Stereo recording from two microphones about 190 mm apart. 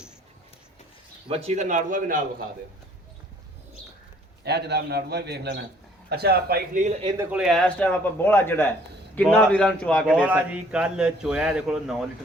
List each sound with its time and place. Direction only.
1.3 s a man's voice: 35° right (ahead or behind)
4.4 s a man's voice: 60° right (ahead or behind)
7.0 s speech: 20° right (ahead or behind)
7.3 s a man's voice: centre (ahead or behind)
10.1 s a man's voice: 5° right (ahead or behind)